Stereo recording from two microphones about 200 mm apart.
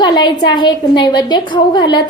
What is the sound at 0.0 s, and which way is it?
A woman's voice, 20° left (ahead or behind).